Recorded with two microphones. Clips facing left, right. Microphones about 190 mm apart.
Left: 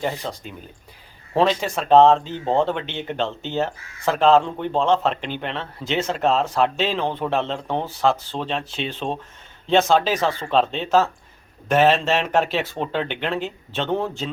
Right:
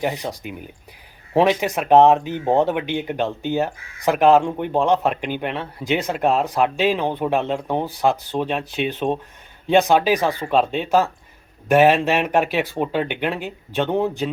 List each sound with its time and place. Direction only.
0.0 s speech: 15° right (ahead or behind)